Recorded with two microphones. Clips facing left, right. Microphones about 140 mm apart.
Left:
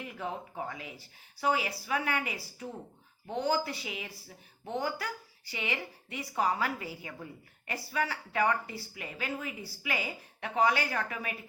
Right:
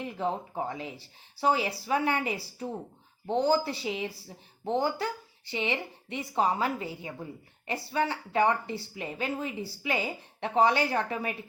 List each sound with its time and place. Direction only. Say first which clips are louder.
0.0 s speech: right 6 dB; 30° right (ahead or behind)